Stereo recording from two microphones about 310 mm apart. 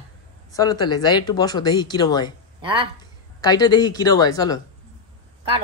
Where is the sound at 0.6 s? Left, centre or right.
Centre.